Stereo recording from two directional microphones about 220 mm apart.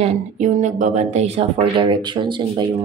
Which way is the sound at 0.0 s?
30° right (ahead or behind).